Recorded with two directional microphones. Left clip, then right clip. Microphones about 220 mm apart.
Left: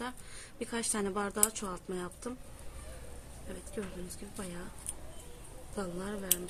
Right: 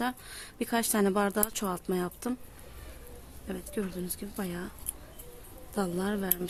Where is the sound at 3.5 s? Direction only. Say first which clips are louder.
Right 6 dB; 45° right (ahead or behind).